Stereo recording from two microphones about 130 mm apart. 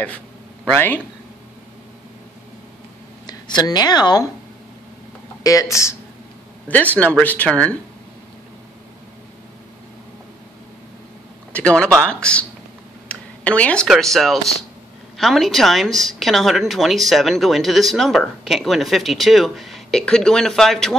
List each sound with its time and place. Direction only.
0.7 s speech: 15° left (ahead or behind)
3.3 s speech: 30° left (ahead or behind)
5.4 s speech: 25° left (ahead or behind)
7.0 s speech: 10° left (ahead or behind)
11.5 s speech: 10° left (ahead or behind)
13.1 s a sound: 10° left (ahead or behind)
13.8 s a woman's voice: centre (ahead or behind)